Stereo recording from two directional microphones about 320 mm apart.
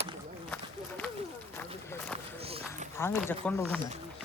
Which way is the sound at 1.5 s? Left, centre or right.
Centre.